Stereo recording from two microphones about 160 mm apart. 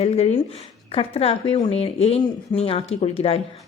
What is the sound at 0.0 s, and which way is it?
Speech, 40° left (ahead or behind).